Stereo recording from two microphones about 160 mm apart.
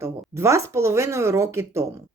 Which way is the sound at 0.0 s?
15° right (ahead or behind).